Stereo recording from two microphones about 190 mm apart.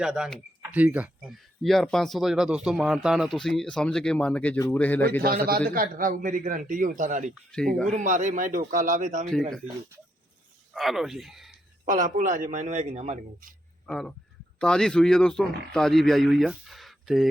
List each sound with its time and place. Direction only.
0.0 s speech: 5° right (ahead or behind)
5.2 s a man's voice: 50° right (ahead or behind)
10.8 s speech: centre (ahead or behind)
11.9 s a man's voice: 45° right (ahead or behind)
13.8 s speech: centre (ahead or behind)